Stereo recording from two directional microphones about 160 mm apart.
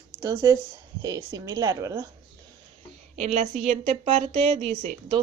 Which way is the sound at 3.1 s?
40° right (ahead or behind).